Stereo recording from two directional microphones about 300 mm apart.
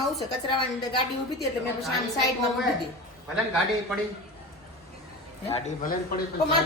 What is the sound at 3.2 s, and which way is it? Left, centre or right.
Speech, centre.